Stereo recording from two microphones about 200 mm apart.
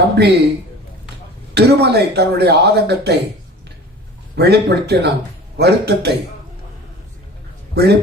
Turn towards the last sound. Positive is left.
turn(degrees=-55)  # may be behind; listen again after turning